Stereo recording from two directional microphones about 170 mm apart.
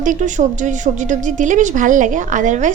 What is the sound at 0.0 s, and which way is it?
A woman's voice, 50° right (ahead or behind).